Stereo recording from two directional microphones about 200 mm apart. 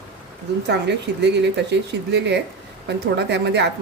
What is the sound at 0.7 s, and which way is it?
Speech, 60° right (ahead or behind).